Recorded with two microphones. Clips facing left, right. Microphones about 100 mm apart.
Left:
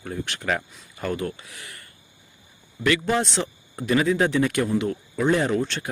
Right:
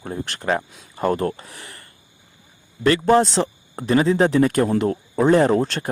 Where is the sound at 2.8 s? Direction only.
40° right (ahead or behind).